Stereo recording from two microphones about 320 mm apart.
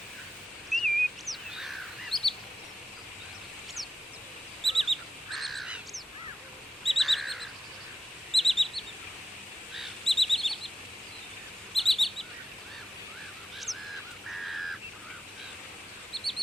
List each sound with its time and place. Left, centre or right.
0.7 s bird: centre
4.6 s bird: centre
7.0 s bird: centre
8.3 s chirp: centre
11.7 s chirp: centre
13.7 s goose: centre
14.4 s a sound: centre
16.1 s chicken: centre